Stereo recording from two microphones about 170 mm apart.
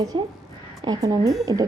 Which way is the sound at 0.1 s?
30° right (ahead or behind).